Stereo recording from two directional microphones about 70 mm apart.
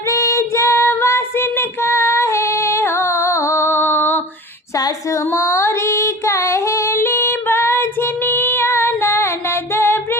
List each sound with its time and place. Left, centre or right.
0.1 s child singing: left
5.3 s female singing: left
9.7 s music: left